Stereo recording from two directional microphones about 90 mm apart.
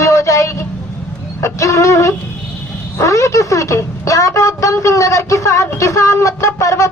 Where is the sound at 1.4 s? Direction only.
35° left (ahead or behind).